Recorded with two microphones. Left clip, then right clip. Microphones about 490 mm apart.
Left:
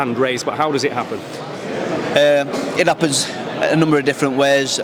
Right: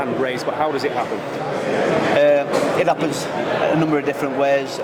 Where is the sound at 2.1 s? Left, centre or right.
Left.